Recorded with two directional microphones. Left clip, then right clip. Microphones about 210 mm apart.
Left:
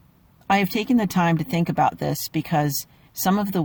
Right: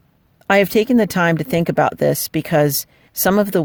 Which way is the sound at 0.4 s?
50° right (ahead or behind).